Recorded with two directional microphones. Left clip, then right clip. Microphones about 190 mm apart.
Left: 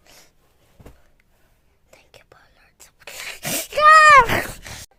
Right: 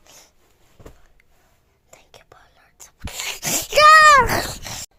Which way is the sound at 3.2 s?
10° right (ahead or behind).